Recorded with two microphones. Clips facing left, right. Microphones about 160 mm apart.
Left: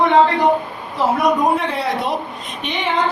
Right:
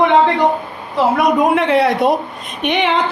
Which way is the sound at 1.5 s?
75° right (ahead or behind).